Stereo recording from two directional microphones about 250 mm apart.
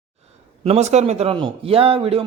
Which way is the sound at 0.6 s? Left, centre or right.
Right.